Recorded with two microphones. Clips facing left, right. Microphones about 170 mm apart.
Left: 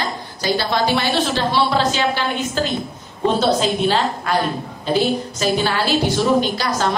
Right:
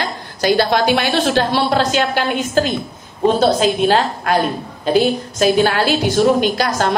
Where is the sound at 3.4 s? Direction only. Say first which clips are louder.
Right 2 dB; 50° right (ahead or behind).